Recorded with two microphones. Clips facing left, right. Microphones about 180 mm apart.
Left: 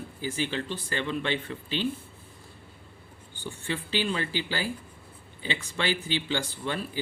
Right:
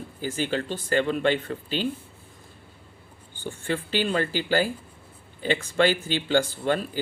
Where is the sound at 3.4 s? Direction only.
50° right (ahead or behind).